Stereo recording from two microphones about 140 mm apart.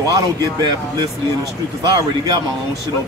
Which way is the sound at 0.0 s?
30° right (ahead or behind).